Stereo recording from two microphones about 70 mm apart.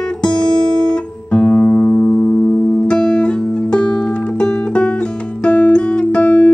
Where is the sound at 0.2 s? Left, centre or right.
Centre.